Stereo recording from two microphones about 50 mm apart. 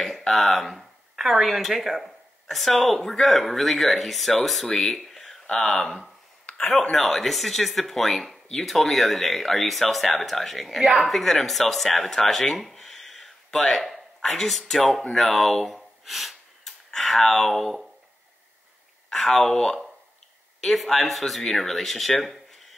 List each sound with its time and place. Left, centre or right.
0.3 s speech: centre
4.6 s speech: centre
4.9 s a sound: centre
5.6 s speech: centre
6.7 s speech: centre
10.8 s speech: centre
11.1 s speech: centre
12.7 s a sound: centre
14.7 s speech: centre
19.0 s speech: centre